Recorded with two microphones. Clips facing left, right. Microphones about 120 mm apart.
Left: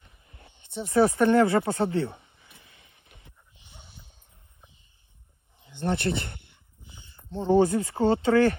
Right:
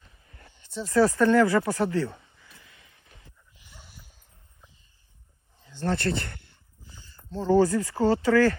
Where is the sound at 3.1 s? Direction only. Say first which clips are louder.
Left 1 dB; 25° left (ahead or behind).